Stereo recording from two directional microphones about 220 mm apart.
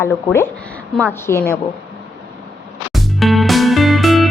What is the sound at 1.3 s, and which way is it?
Speech, 45° left (ahead or behind).